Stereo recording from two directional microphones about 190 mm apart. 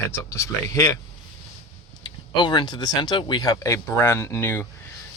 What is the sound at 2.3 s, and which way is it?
Speech, 25° left (ahead or behind).